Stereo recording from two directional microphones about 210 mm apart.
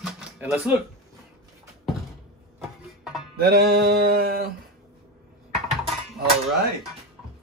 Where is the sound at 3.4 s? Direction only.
50° right (ahead or behind).